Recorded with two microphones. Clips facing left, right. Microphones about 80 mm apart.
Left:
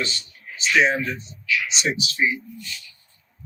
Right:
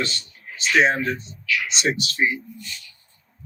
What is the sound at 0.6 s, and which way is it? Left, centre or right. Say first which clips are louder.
Speech: right 1 dB; right.